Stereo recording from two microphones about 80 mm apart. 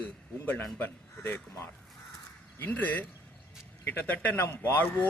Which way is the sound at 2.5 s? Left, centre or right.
Left.